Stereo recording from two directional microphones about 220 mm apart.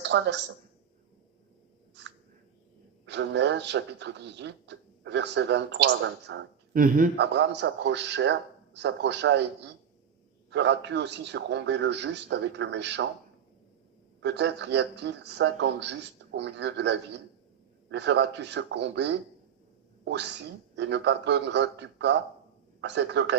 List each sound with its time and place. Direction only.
0.0 s speech: 50° right (ahead or behind)
3.1 s speech: 55° right (ahead or behind)
6.7 s speech: 40° right (ahead or behind)
7.3 s speech: 55° right (ahead or behind)
14.2 s speech: 55° right (ahead or behind)
20.7 s speech: 50° right (ahead or behind)